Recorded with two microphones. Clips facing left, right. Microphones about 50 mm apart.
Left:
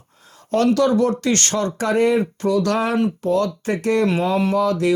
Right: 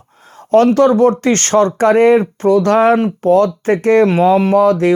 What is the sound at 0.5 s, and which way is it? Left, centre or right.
Speech, right.